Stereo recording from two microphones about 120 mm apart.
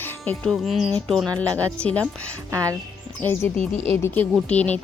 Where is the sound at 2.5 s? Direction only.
25° right (ahead or behind).